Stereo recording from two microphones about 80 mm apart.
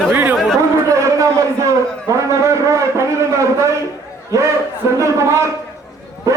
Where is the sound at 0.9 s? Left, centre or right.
Right.